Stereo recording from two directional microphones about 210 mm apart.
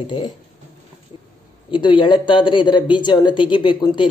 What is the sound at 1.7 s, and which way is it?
Speech, 20° left (ahead or behind).